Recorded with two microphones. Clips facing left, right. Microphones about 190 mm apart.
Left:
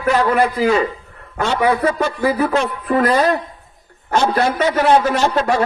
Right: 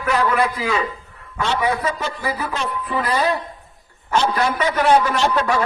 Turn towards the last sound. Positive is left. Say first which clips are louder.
# left 3 dB
turn(degrees=40)  # may be behind; listen again after turning